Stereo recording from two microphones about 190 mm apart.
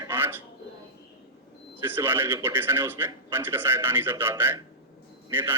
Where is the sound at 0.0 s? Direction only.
10° right (ahead or behind).